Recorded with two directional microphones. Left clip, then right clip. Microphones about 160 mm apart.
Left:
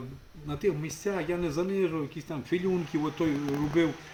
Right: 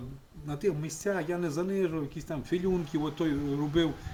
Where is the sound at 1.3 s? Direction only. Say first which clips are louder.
Left 1 dB; 25° right (ahead or behind).